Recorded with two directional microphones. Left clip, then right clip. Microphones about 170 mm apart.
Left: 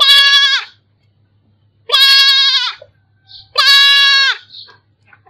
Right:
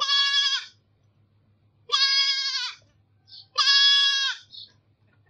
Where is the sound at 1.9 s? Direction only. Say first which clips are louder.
Left 14 dB; 50° left (ahead or behind).